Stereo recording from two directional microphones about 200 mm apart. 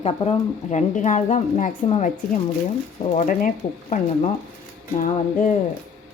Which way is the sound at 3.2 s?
40° left (ahead or behind).